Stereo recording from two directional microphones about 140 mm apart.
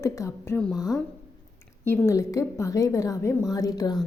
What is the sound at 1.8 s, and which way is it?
A woman's voice, 20° left (ahead or behind).